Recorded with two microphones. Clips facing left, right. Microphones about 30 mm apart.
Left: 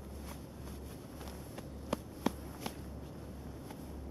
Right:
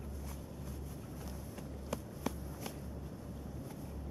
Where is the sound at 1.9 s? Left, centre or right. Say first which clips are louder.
Left 4 dB; left.